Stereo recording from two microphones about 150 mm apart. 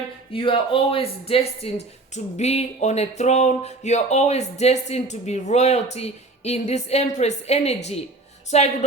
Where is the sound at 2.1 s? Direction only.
45° left (ahead or behind).